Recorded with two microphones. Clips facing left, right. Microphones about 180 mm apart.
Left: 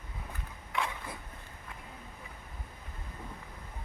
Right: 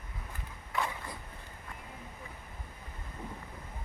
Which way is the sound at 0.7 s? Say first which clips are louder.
Even; centre (ahead or behind).